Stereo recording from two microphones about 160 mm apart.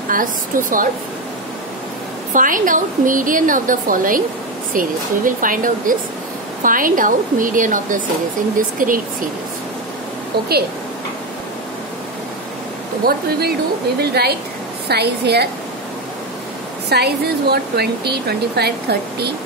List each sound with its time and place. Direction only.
0.1 s a woman's voice: 55° right (ahead or behind)
2.3 s a woman's voice: 55° right (ahead or behind)
13.0 s speech: 75° right (ahead or behind)
16.9 s speech: 90° right